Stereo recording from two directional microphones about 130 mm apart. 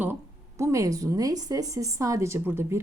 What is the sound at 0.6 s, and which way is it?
Speech, 25° right (ahead or behind).